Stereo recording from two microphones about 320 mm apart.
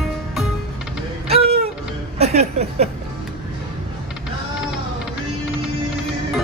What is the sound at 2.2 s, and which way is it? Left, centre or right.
Speech, centre.